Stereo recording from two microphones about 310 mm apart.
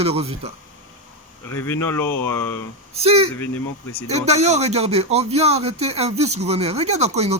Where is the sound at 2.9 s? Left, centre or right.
Centre.